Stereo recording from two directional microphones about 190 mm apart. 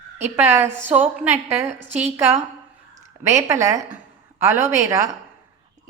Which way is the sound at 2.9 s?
15° right (ahead or behind).